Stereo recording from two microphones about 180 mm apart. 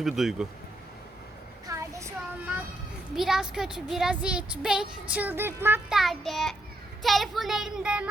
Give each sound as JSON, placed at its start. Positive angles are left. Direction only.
{"t": 0.0, "sound": "speech", "side_deg": 0}
{"t": 1.6, "sound": "a sound", "side_deg": -15}
{"t": 3.2, "sound": "speech", "side_deg": 0}
{"t": 6.0, "sound": "speech", "side_deg": 0}